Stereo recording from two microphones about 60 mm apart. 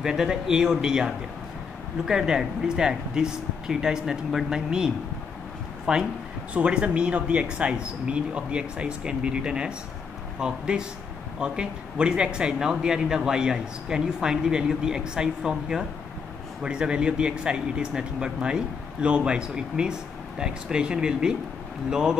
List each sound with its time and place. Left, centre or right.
0.0 s speech: centre